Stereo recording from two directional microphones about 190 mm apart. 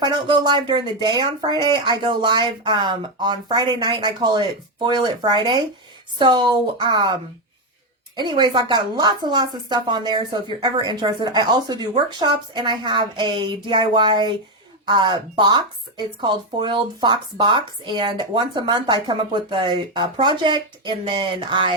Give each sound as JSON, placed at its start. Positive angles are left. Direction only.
{"t": 0.0, "sound": "speech", "side_deg": -25}